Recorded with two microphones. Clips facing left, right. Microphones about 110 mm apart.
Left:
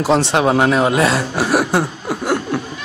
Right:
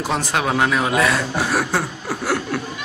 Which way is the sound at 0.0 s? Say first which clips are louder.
Left 7 dB; 25° left (ahead or behind).